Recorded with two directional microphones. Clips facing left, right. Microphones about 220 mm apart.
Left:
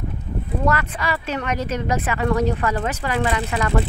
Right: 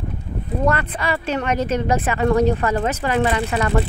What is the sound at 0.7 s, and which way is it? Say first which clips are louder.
Speech: right 2 dB; 30° right (ahead or behind).